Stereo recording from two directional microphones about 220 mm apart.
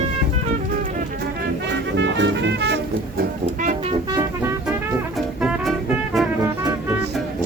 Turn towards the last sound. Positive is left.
turn(degrees=0)  # may be behind; listen again after turning